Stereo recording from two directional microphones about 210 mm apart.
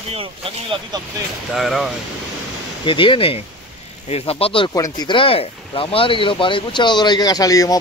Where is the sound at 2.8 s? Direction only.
25° left (ahead or behind).